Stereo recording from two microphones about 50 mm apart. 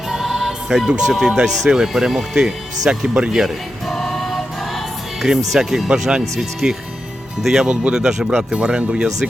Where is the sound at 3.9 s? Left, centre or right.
Centre.